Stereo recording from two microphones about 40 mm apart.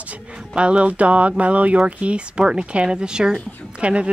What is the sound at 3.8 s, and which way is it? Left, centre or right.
Speech, right.